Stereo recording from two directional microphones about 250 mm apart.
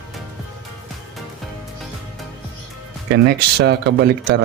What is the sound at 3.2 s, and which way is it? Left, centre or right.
Speech, right.